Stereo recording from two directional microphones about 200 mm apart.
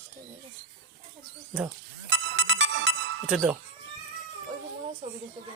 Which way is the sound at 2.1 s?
70° right (ahead or behind).